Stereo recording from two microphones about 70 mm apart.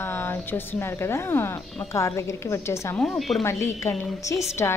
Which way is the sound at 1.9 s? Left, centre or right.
Left.